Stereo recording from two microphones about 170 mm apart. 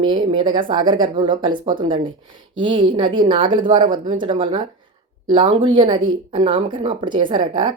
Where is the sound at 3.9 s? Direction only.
50° right (ahead or behind).